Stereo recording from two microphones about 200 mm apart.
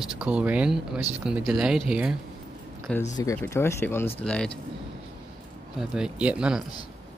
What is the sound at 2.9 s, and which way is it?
Speech, 5° left (ahead or behind).